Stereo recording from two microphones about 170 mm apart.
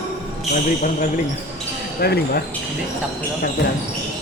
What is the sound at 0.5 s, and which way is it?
Speech, 50° left (ahead or behind).